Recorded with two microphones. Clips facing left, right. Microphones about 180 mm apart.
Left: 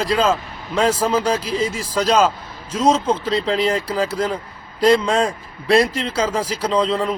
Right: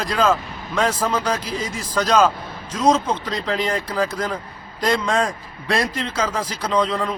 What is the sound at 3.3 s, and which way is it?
Speech, 30° left (ahead or behind).